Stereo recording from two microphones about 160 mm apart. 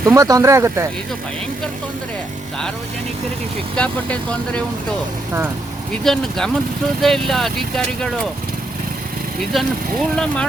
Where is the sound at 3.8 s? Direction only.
5° left (ahead or behind).